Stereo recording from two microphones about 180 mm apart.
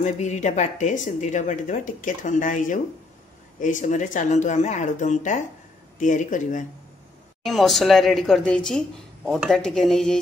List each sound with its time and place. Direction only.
0.0 s speech: 40° left (ahead or behind)
7.4 s speech: centre (ahead or behind)